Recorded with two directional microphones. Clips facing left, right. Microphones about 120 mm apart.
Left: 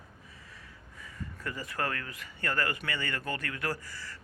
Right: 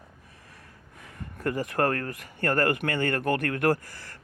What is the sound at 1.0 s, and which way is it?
Speech, 60° right (ahead or behind).